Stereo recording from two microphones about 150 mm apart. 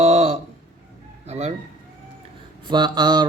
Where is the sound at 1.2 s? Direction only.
45° right (ahead or behind).